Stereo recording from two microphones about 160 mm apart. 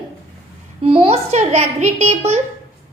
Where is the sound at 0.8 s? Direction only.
35° right (ahead or behind).